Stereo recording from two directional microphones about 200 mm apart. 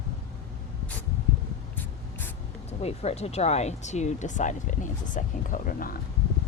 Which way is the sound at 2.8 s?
30° left (ahead or behind).